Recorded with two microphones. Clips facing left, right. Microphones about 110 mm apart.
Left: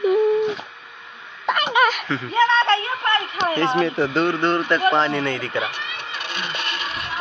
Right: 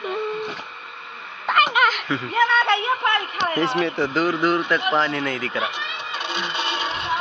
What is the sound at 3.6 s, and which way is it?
Speech, centre (ahead or behind).